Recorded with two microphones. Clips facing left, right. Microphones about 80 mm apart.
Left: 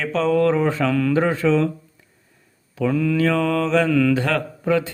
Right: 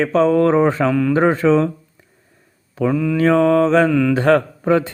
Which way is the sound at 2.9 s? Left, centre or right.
Centre.